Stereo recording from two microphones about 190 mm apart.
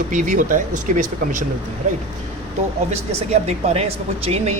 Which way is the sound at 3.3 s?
35° right (ahead or behind).